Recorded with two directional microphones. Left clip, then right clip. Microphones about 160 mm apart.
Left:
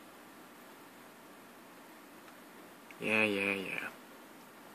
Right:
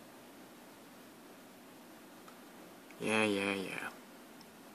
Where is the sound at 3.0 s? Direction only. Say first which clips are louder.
Left 2 dB; 10° right (ahead or behind).